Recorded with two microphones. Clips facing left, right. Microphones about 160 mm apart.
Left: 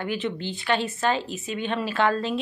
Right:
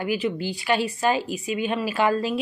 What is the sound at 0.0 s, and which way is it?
A woman's voice, 10° right (ahead or behind).